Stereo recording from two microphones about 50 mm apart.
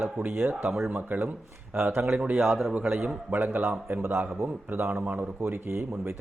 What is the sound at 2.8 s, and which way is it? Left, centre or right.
Speech, right.